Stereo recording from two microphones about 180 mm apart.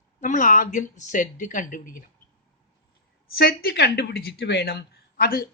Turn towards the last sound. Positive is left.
turn(degrees=55)  # may be behind; listen again after turning